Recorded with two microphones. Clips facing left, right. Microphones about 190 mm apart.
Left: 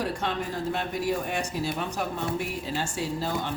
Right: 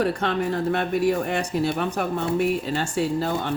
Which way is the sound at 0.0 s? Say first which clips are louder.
Right 6 dB; 60° right (ahead or behind).